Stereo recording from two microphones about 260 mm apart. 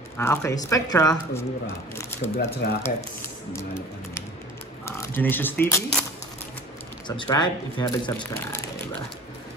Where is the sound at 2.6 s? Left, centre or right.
Left.